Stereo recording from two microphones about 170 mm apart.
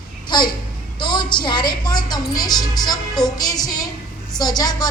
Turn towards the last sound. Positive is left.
turn(degrees=25)  # may be behind; listen again after turning